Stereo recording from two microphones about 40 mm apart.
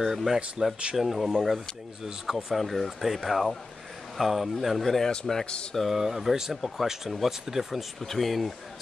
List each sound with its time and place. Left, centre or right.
0.0 s speech: centre
5.4 s speech: left
5.9 s speech: centre
8.0 s speech: centre